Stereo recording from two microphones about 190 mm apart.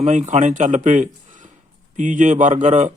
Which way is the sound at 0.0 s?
40° right (ahead or behind).